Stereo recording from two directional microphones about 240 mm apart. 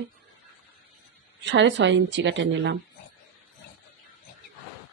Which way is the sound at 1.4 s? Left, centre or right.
Right.